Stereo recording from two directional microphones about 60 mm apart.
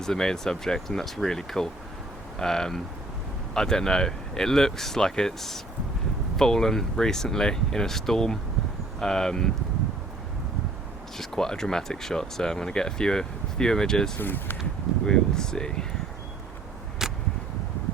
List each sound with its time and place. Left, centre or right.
0.0 s speech: centre
11.2 s speech: centre
14.2 s speech: left
15.0 s speech: centre
17.0 s arrow: centre